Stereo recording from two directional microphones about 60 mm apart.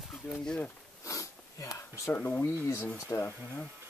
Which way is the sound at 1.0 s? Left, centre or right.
Left.